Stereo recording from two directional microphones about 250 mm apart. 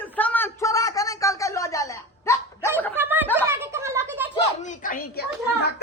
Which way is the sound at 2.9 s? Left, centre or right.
Centre.